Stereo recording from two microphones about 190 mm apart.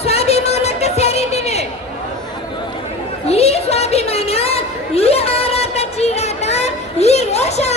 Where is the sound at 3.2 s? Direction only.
35° left (ahead or behind).